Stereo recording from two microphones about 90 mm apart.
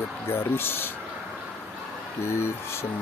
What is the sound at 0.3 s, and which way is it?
Speech, 25° left (ahead or behind).